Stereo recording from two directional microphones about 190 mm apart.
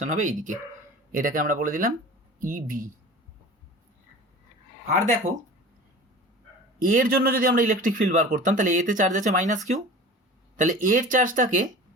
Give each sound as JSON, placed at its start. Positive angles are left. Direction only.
{"t": 0.0, "sound": "a man's voice", "side_deg": -40}
{"t": 4.9, "sound": "speech", "side_deg": -40}
{"t": 6.7, "sound": "a man's voice", "side_deg": -45}